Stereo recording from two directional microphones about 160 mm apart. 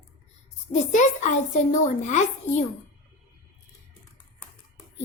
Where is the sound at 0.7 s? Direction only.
45° left (ahead or behind).